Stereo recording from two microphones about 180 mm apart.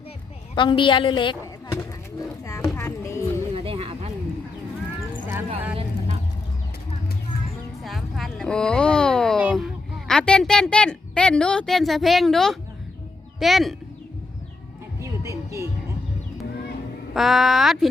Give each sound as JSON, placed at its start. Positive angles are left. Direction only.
{"t": 0.5, "sound": "a woman's voice", "side_deg": 25}
{"t": 1.7, "sound": "pigeon", "side_deg": 15}
{"t": 2.7, "sound": "music", "side_deg": 15}
{"t": 3.5, "sound": "a sound", "side_deg": -30}
{"t": 7.9, "sound": "a sound", "side_deg": 0}
{"t": 9.4, "sound": "a woman's voice", "side_deg": -5}
{"t": 15.0, "sound": "music", "side_deg": -15}
{"t": 17.2, "sound": "speech", "side_deg": 0}